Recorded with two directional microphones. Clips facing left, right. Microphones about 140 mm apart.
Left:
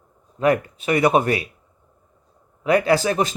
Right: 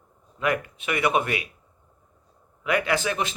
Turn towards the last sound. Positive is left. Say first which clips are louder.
# left 7 dB
turn(degrees=40)  # may be behind; listen again after turning